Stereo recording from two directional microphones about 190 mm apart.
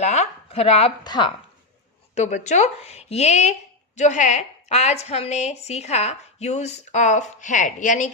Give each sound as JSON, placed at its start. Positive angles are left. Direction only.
{"t": 0.0, "sound": "a woman's voice", "side_deg": 35}
{"t": 2.1, "sound": "a woman's voice", "side_deg": 40}